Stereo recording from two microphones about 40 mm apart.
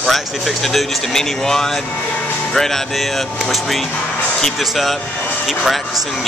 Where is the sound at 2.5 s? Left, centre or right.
Centre.